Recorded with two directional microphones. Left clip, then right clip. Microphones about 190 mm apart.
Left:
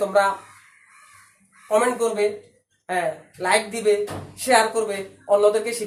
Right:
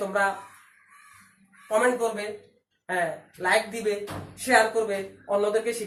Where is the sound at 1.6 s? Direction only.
5° left (ahead or behind).